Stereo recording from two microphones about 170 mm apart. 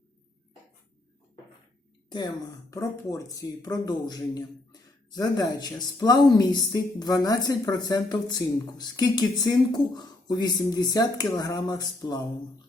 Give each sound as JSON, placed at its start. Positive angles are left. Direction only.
{"t": 2.0, "sound": "speech", "side_deg": 25}